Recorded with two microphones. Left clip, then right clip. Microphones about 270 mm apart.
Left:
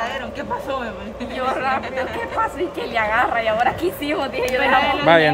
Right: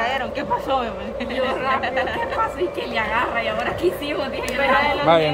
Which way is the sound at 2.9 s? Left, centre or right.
Centre.